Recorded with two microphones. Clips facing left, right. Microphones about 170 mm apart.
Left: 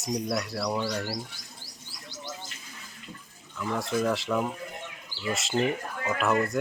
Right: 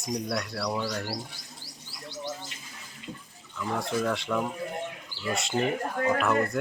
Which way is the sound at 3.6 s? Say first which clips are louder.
Left 1 dB; 5° left (ahead or behind).